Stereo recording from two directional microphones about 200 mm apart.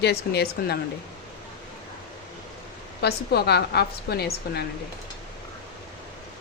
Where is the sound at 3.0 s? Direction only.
55° left (ahead or behind).